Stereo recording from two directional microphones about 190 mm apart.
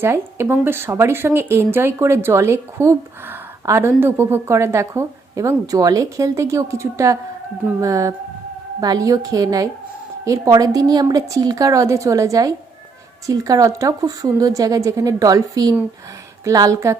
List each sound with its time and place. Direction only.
0.0 s a woman's voice: 10° right (ahead or behind)